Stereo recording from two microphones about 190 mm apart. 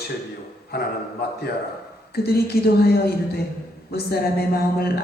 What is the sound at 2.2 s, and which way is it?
Speech, 55° left (ahead or behind).